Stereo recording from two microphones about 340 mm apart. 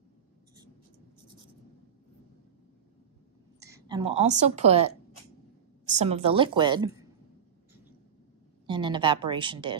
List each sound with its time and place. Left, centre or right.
3.6 s a woman's voice: centre
8.6 s a woman's voice: centre